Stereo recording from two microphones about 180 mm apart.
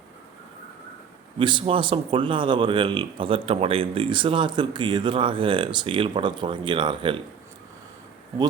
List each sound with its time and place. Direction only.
1.4 s speech: 25° right (ahead or behind)